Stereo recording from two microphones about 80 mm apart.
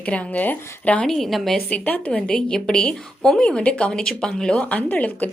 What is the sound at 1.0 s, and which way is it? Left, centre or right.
Speech, centre.